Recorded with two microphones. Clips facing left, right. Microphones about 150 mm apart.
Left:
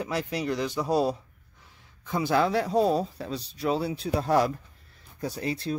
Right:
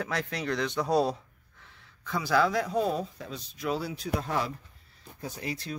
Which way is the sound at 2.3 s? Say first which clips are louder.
Left 2 dB; 25° left (ahead or behind).